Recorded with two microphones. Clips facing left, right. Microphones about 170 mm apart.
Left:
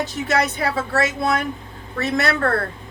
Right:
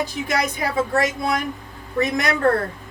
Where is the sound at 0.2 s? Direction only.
50° left (ahead or behind).